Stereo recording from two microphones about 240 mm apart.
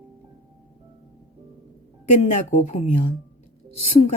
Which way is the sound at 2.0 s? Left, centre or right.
Left.